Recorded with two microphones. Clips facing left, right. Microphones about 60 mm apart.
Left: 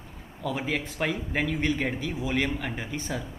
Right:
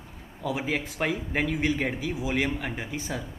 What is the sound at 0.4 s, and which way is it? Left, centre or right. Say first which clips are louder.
Speech: right 1 dB; centre.